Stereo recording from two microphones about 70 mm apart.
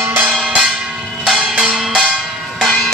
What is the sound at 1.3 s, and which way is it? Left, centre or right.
Music, centre.